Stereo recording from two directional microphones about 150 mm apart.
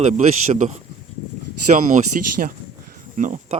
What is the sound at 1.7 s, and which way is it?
Speech, 60° right (ahead or behind).